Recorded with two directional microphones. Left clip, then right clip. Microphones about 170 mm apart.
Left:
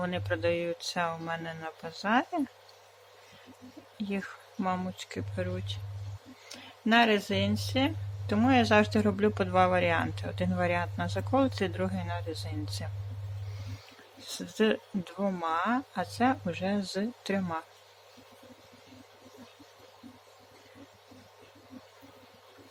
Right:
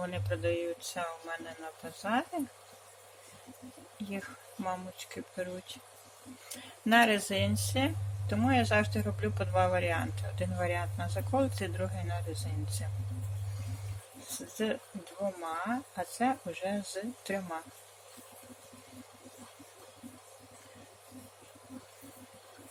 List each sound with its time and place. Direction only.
0.0 s speech: 20° left (ahead or behind)
4.6 s speech: 20° left (ahead or behind)
14.6 s speech: 35° left (ahead or behind); by 17.6 s 15° left (ahead or behind)